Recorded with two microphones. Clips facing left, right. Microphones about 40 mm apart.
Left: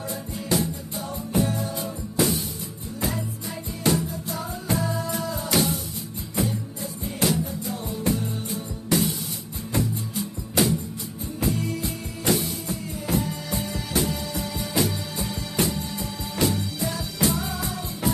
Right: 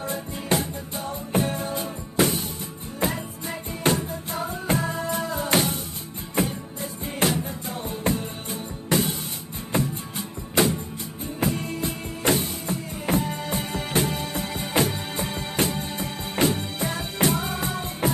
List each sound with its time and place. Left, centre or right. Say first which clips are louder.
0.1 s music: right 1 dB; right
3.8 s music: even; right